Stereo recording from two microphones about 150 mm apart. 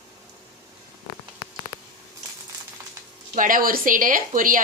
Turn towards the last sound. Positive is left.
turn(degrees=-65)  # may be behind; listen again after turning